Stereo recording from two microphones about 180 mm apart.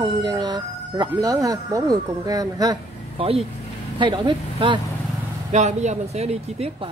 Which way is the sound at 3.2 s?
35° right (ahead or behind).